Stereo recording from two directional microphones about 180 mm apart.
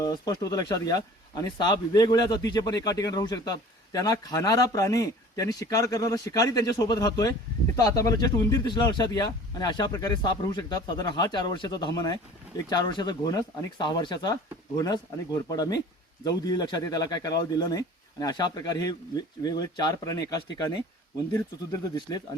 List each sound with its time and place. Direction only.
0.0 s speech: 20° left (ahead or behind)